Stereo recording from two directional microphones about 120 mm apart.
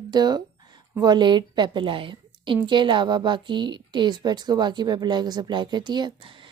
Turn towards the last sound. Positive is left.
turn(degrees=-40)  # may be behind; listen again after turning